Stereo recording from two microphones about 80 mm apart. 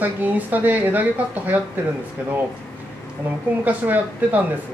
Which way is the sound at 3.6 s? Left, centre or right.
Right.